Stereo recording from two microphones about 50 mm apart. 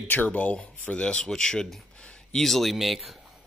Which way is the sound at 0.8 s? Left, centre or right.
Centre.